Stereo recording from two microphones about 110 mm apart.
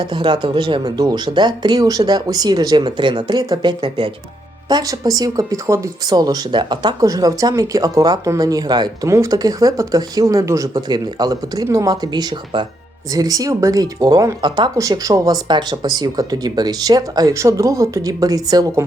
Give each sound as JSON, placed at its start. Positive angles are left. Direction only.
{"t": 0.0, "sound": "speech", "side_deg": -45}
{"t": 4.7, "sound": "speech", "side_deg": -35}
{"t": 7.0, "sound": "speech", "side_deg": -35}
{"t": 9.0, "sound": "speech", "side_deg": -30}